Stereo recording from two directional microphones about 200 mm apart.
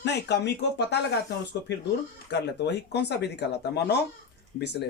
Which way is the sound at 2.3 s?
55° left (ahead or behind).